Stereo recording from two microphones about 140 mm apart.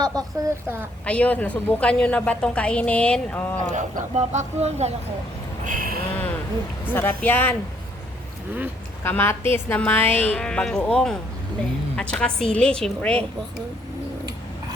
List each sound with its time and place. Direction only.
0.0 s a woman's voice: 25° right (ahead or behind)
1.0 s a woman's voice: 10° left (ahead or behind)
3.7 s speech: 65° right (ahead or behind)
5.6 s speech: 75° right (ahead or behind)
6.9 s a woman's voice: 15° left (ahead or behind)
9.0 s a woman's voice: 15° left (ahead or behind)